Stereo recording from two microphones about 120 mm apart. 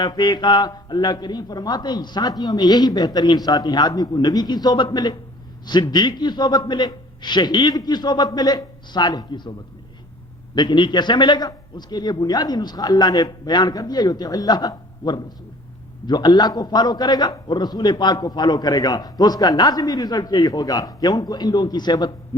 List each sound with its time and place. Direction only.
0.0 s a man's voice: 35° left (ahead or behind)
10.5 s a man's voice: 40° left (ahead or behind)